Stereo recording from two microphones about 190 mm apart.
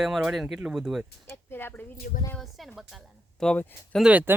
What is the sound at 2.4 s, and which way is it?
Speech, centre (ahead or behind).